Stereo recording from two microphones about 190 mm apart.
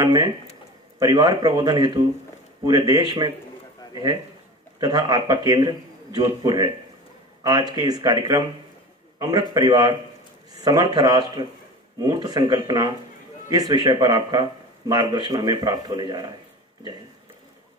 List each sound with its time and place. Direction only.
0.0 s speech: 20° right (ahead or behind)
4.7 s speech: 20° right (ahead or behind)
7.7 s speech: 20° right (ahead or behind)